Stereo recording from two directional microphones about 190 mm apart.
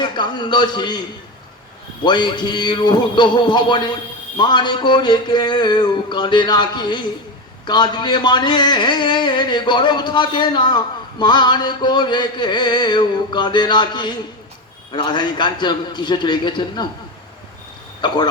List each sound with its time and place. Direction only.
0.0 s a man's voice: 25° left (ahead or behind)
2.0 s speech: 25° left (ahead or behind)